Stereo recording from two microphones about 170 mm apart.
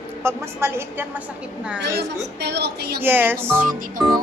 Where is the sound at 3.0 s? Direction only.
10° right (ahead or behind).